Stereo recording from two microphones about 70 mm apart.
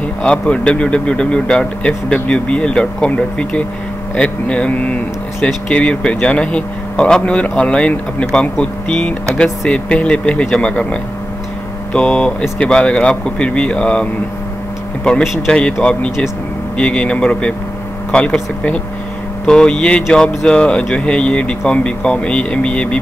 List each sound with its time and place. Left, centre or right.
0.2 s speech: centre
15.0 s speech: centre